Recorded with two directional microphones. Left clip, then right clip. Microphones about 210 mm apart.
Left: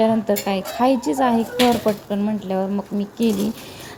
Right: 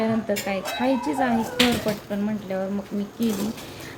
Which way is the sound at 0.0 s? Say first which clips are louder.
Left 6 dB; 30° left (ahead or behind).